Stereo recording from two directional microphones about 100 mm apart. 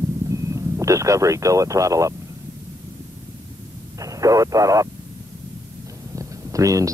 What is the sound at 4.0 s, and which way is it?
Speech, 35° right (ahead or behind).